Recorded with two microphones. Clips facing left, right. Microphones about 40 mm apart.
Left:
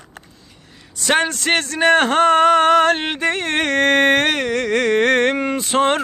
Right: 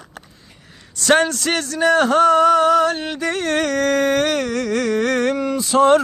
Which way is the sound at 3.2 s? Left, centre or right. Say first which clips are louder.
Left 1 dB; left.